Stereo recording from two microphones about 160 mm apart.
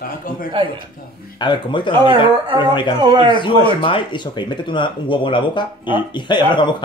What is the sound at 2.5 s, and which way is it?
Speech, 30° left (ahead or behind).